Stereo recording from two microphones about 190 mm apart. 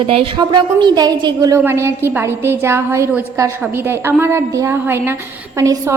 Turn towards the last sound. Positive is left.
turn(degrees=-15)  # may be behind; listen again after turning